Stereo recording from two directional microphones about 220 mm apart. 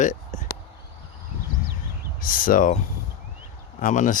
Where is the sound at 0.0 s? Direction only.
35° left (ahead or behind).